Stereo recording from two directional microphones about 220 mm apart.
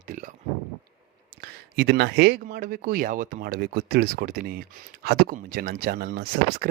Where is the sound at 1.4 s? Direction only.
45° right (ahead or behind).